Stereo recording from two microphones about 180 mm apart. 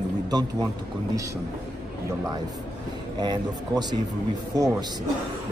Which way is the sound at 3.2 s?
25° right (ahead or behind).